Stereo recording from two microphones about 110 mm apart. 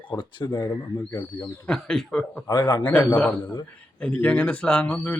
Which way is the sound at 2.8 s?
15° left (ahead or behind).